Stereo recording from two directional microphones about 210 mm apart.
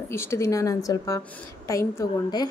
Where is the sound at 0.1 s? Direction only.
10° left (ahead or behind).